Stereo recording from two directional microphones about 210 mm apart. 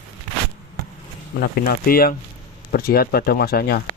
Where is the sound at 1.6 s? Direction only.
45° left (ahead or behind).